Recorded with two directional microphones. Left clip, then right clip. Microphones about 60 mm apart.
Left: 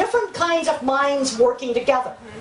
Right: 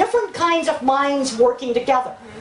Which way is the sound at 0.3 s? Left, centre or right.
Right.